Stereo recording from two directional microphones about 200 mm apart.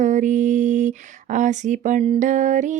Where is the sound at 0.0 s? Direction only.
40° right (ahead or behind).